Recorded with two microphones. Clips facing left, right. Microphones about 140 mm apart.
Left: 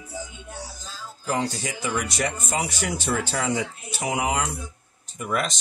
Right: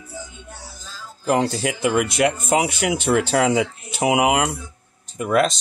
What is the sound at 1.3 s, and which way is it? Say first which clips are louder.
Speech: right 7 dB; 70° right (ahead or behind).